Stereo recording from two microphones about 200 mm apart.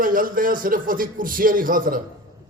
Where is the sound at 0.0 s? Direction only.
45° right (ahead or behind).